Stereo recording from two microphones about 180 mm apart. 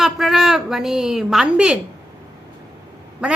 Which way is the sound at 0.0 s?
Centre (ahead or behind).